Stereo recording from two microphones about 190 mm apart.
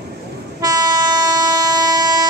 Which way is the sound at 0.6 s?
20° right (ahead or behind).